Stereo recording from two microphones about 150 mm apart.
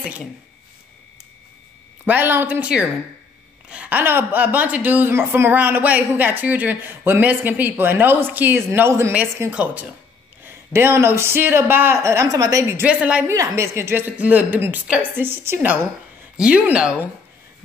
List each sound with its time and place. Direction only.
2.0 s a woman's voice: 15° right (ahead or behind)
12.8 s a woman's voice: 10° right (ahead or behind)
13.3 s a woman's voice: 20° right (ahead or behind)